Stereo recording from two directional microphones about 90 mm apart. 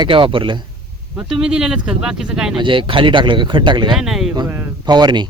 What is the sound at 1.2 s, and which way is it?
Speech, 10° right (ahead or behind).